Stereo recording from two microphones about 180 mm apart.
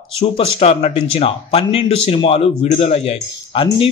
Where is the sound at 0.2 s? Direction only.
30° left (ahead or behind).